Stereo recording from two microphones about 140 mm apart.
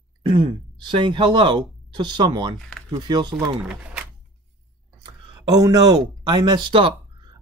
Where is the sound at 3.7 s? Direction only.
5° right (ahead or behind).